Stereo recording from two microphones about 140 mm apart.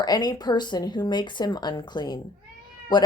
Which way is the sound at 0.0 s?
30° left (ahead or behind).